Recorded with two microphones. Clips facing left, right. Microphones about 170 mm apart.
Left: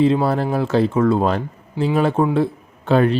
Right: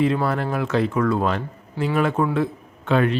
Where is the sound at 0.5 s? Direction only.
30° left (ahead or behind).